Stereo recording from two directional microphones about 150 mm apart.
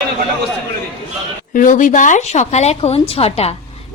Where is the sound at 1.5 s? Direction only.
60° left (ahead or behind); by 3.5 s 40° left (ahead or behind).